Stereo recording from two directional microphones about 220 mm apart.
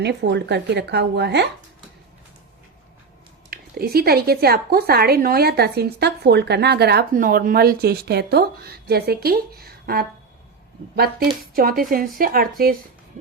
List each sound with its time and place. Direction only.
0.0 s speech: 50° right (ahead or behind)
3.5 s a woman's voice: 45° right (ahead or behind)